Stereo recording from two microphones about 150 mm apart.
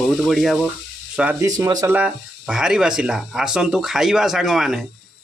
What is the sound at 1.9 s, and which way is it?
Speech, 10° right (ahead or behind).